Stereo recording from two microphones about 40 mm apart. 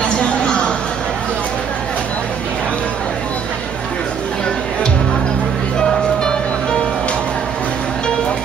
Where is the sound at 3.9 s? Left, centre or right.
Left.